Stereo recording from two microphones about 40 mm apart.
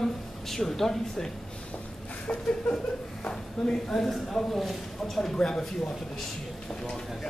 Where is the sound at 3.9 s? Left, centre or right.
Centre.